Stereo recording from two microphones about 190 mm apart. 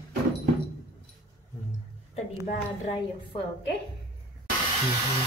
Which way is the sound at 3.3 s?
30° left (ahead or behind).